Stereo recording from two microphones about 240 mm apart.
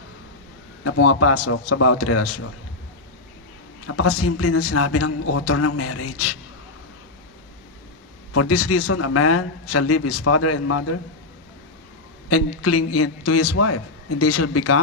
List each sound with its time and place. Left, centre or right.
0.8 s a man's voice: left
3.8 s a man's voice: left
8.3 s a man's voice: left
12.3 s a man's voice: left